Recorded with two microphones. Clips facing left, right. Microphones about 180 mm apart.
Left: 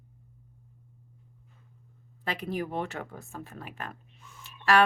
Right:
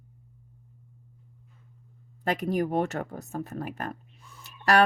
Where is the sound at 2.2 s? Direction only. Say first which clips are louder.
Right 6 dB; 45° right (ahead or behind).